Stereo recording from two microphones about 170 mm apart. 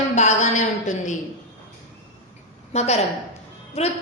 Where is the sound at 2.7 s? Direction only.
40° left (ahead or behind).